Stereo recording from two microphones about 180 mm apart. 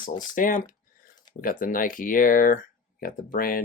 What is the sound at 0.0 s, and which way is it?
Speech, 50° left (ahead or behind).